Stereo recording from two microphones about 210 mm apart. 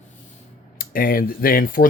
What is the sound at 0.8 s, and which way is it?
Speech, 45° left (ahead or behind).